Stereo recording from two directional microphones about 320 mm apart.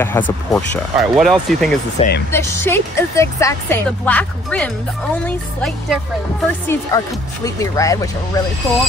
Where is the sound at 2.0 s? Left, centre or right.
Left.